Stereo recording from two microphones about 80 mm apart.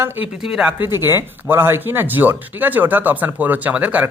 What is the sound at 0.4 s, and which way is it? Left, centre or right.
Speech, centre.